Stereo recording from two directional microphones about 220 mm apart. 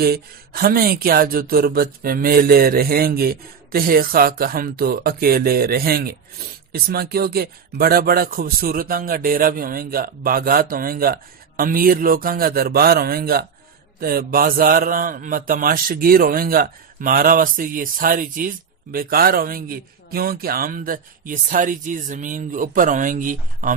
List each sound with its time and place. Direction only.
0.0 s speech: 45° right (ahead or behind)